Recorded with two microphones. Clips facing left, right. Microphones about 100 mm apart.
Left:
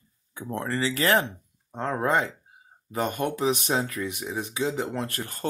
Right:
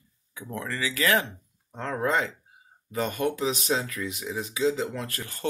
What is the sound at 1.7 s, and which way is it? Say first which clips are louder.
Speech: left 2 dB; 20° left (ahead or behind).